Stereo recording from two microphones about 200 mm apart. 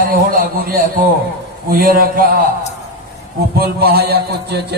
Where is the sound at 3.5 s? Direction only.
50° right (ahead or behind).